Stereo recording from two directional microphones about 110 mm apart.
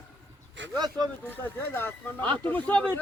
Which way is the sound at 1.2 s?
20° left (ahead or behind).